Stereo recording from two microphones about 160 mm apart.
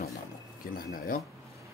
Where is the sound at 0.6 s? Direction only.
65° left (ahead or behind).